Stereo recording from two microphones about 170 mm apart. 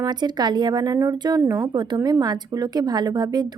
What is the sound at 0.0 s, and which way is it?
A woman's voice, 25° right (ahead or behind).